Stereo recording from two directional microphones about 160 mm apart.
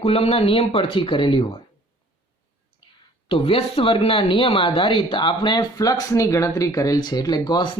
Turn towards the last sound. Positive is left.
turn(degrees=25)  # may be behind; listen again after turning